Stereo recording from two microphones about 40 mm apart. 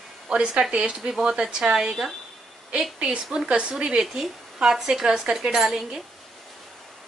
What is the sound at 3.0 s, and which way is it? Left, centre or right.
A woman's voice, right.